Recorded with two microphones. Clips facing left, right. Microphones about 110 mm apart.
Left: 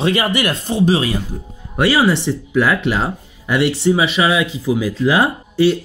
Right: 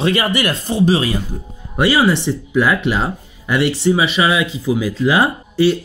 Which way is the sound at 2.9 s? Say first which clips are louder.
Even; 5° left (ahead or behind).